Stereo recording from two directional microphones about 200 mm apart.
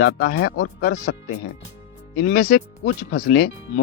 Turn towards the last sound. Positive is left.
turn(degrees=50)  # may be behind; listen again after turning